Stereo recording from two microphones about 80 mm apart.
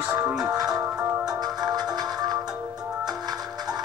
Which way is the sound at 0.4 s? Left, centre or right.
Right.